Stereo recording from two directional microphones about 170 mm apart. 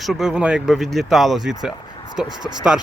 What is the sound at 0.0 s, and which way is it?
Speech, centre (ahead or behind).